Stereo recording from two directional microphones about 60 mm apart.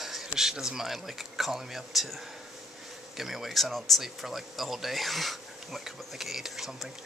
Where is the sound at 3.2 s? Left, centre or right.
Centre.